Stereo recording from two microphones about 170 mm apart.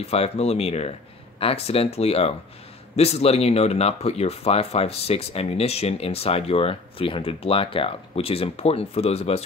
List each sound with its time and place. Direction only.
0.0 s speech: 35° left (ahead or behind)